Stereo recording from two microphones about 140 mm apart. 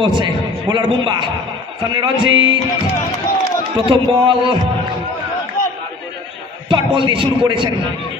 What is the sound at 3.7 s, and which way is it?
Speech, 35° right (ahead or behind).